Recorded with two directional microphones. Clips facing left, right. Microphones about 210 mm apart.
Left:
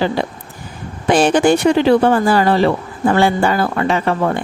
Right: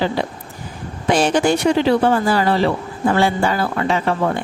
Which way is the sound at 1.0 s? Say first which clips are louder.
Left 3 dB; 55° left (ahead or behind).